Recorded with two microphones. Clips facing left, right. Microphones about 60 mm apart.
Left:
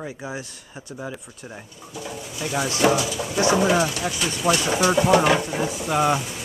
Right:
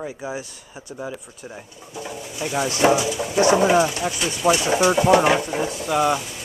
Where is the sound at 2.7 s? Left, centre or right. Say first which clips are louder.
Right 2 dB; right.